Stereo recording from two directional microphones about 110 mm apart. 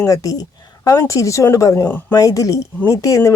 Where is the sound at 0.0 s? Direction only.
30° left (ahead or behind).